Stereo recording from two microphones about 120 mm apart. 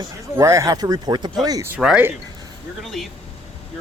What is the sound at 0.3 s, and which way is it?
Speech, 25° right (ahead or behind).